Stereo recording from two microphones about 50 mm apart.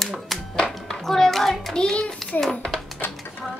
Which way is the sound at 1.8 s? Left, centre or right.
Centre.